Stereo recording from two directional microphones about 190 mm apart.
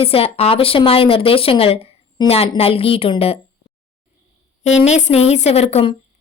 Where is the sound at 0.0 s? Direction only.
30° left (ahead or behind).